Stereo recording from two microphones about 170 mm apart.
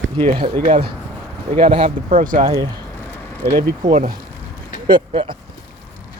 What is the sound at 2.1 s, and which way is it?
Speech, 55° right (ahead or behind).